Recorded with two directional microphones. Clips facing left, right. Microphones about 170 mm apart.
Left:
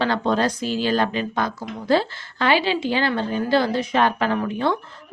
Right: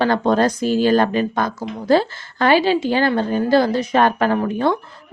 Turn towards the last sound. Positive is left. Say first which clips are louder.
# right 4 dB
turn(degrees=-45)  # may be behind; listen again after turning